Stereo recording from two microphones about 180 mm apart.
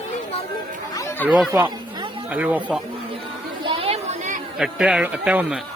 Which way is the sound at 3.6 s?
30° right (ahead or behind).